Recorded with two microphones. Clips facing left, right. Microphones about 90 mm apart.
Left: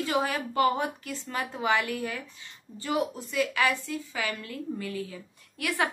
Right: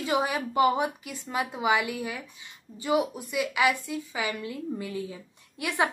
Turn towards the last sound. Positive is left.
turn(degrees=-20)  # may be behind; listen again after turning